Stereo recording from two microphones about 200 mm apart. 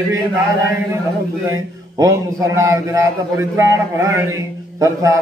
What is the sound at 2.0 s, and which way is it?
A man's voice, 15° right (ahead or behind).